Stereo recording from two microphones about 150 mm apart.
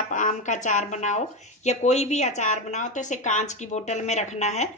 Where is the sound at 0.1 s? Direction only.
55° left (ahead or behind).